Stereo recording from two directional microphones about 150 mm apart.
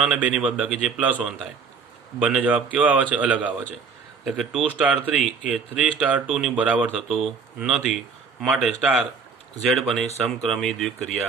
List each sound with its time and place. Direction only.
0.0 s speech: 5° right (ahead or behind)
2.1 s a man's voice: 10° right (ahead or behind)